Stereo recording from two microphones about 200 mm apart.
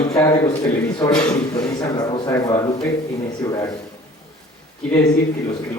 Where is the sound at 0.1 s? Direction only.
15° left (ahead or behind).